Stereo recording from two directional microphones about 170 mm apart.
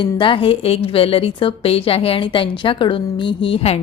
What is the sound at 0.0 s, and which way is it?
A woman's voice, 30° left (ahead or behind).